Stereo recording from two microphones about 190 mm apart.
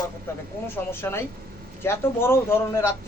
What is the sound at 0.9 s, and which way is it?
Speech, 10° left (ahead or behind).